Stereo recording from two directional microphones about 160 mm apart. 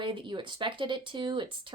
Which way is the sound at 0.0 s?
30° right (ahead or behind).